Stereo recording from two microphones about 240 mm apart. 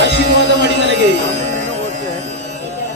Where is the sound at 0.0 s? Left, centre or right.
Right.